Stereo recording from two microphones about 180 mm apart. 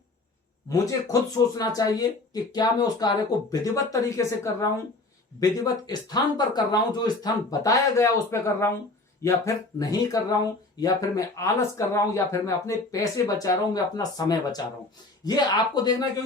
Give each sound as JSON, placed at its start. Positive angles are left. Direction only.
{"t": 0.7, "sound": "speech", "side_deg": 20}